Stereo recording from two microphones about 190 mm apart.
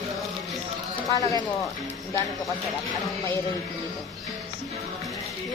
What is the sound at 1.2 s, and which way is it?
Speech, 20° left (ahead or behind).